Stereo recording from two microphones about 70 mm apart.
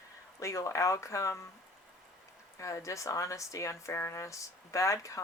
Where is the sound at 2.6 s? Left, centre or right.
Left.